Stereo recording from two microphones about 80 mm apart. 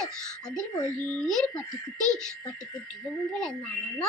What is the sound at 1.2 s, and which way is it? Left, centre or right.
Speech, centre.